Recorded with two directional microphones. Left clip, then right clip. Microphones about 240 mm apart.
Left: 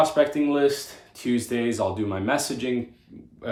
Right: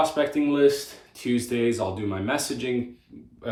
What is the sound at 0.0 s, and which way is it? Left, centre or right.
Speech, centre.